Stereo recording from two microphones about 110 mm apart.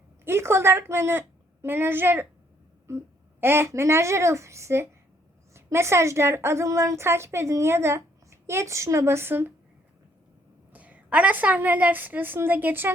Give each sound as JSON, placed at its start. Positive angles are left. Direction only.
{"t": 0.3, "sound": "a woman's voice", "side_deg": -25}
{"t": 10.7, "sound": "a woman's voice", "side_deg": -15}